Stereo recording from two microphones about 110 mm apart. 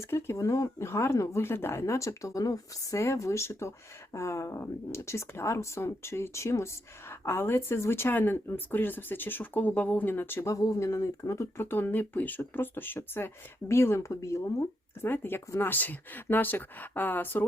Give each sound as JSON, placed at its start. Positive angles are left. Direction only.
{"t": 0.1, "sound": "speech", "side_deg": 25}
{"t": 15.0, "sound": "speech", "side_deg": 15}